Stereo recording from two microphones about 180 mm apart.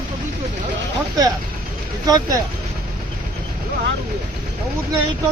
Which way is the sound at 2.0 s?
20° right (ahead or behind).